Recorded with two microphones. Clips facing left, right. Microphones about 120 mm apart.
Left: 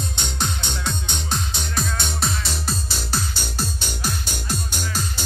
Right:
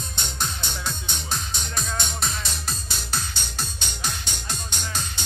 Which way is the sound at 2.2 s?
30° left (ahead or behind).